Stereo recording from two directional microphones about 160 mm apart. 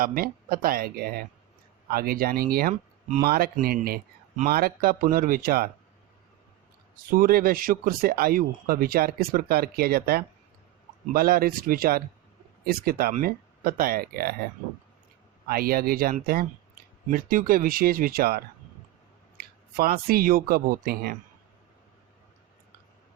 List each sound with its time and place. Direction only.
0.0 s speech: 65° right (ahead or behind)
6.9 s speech: 65° right (ahead or behind)
15.4 s speech: 70° right (ahead or behind)